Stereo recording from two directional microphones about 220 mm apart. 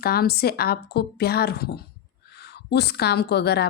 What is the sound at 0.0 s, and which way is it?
A woman's voice, 45° left (ahead or behind).